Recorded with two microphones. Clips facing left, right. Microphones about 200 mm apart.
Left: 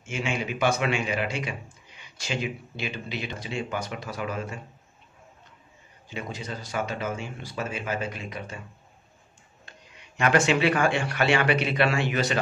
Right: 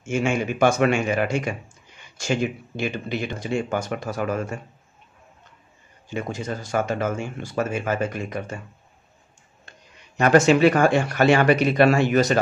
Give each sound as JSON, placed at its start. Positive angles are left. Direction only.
{"t": 0.0, "sound": "speech", "side_deg": -45}
{"t": 6.0, "sound": "speech", "side_deg": -50}
{"t": 10.1, "sound": "speech", "side_deg": -40}